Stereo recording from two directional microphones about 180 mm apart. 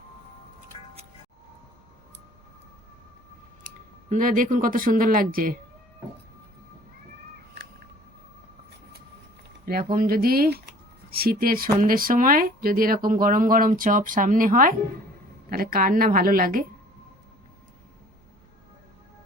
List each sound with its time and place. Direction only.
4.1 s speech: 50° right (ahead or behind)
9.6 s speech: 55° right (ahead or behind)